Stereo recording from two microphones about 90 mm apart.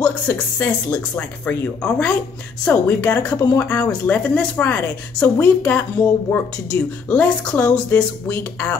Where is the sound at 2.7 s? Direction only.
20° left (ahead or behind).